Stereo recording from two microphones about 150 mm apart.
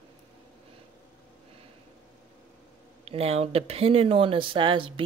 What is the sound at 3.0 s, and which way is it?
Speech, 40° right (ahead or behind).